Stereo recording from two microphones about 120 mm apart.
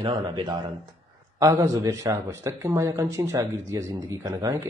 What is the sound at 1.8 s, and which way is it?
A man's voice, 25° right (ahead or behind).